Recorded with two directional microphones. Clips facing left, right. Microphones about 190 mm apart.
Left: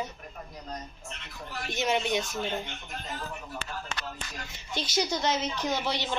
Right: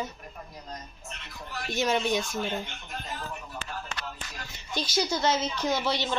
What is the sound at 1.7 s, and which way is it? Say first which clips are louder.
Speech: right 2 dB; 20° left (ahead or behind).